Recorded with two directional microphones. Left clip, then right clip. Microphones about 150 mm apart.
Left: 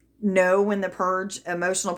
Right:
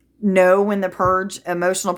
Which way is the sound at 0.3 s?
40° right (ahead or behind).